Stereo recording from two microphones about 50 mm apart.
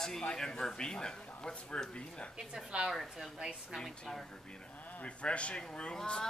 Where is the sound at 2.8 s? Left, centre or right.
Centre.